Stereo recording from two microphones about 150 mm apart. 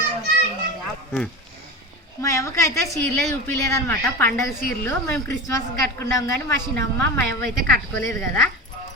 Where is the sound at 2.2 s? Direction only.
20° left (ahead or behind).